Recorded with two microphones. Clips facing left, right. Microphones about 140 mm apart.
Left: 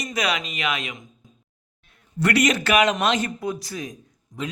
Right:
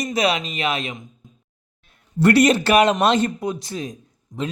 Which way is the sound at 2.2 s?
30° right (ahead or behind).